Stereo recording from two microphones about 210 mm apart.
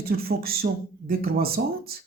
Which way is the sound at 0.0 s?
45° right (ahead or behind).